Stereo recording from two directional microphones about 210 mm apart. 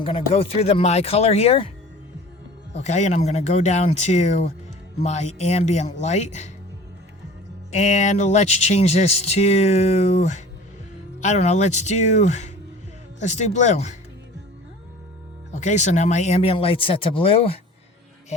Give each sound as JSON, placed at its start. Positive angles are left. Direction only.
{"t": 0.0, "sound": "speech", "side_deg": 25}
{"t": 2.7, "sound": "speech", "side_deg": 35}
{"t": 7.7, "sound": "speech", "side_deg": 35}
{"t": 15.5, "sound": "speech", "side_deg": 35}